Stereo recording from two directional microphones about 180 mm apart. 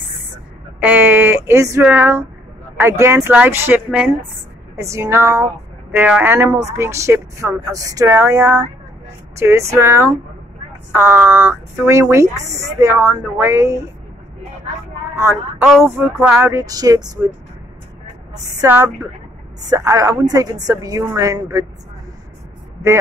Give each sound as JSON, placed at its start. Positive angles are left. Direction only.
{"t": 0.7, "sound": "a woman's voice", "side_deg": -10}
{"t": 15.1, "sound": "a woman's voice", "side_deg": -10}
{"t": 18.3, "sound": "a woman's voice", "side_deg": -15}